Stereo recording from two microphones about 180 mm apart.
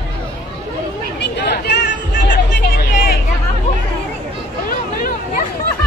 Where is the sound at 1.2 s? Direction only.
70° left (ahead or behind).